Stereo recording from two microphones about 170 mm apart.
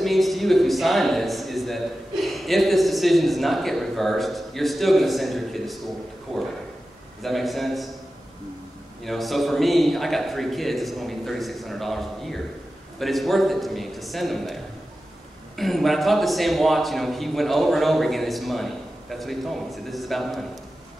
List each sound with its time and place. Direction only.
0.0 s a man's voice: centre (ahead or behind)
9.0 s a man's voice: centre (ahead or behind)